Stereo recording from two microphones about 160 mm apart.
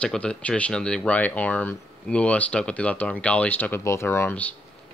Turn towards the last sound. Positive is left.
turn(degrees=10)  # may be behind; listen again after turning